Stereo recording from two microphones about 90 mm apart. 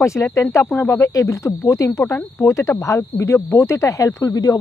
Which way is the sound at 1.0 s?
40° left (ahead or behind).